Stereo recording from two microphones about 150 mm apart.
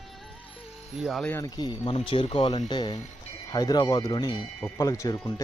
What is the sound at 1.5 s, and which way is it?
Speech, 30° left (ahead or behind).